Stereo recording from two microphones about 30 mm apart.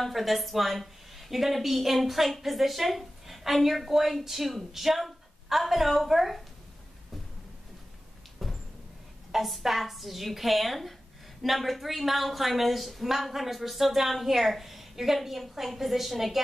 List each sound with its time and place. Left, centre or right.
0.1 s a woman's voice: centre
8.4 s a sound: centre
9.3 s a woman's voice: centre